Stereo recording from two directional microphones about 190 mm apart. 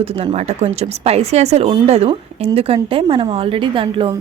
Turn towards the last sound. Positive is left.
turn(degrees=-25)  # may be behind; listen again after turning